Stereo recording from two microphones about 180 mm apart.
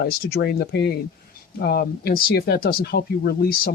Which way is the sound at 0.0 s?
60° left (ahead or behind).